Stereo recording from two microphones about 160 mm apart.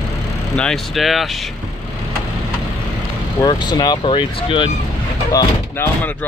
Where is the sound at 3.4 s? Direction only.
25° left (ahead or behind).